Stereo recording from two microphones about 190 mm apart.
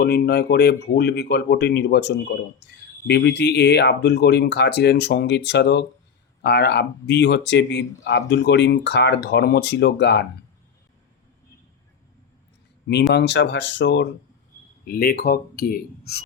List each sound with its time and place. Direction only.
0.0 s speech: 60° left (ahead or behind)
12.9 s speech: 65° left (ahead or behind)
14.8 s speech: 55° left (ahead or behind)